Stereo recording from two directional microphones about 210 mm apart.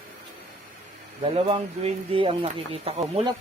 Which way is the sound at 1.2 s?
25° right (ahead or behind).